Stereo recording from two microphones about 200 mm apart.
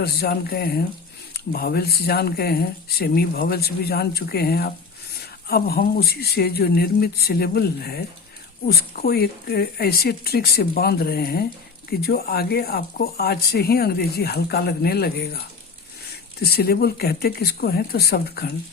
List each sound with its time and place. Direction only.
0.0 s speech: 50° left (ahead or behind)